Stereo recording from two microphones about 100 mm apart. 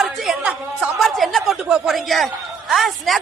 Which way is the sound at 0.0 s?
Centre (ahead or behind).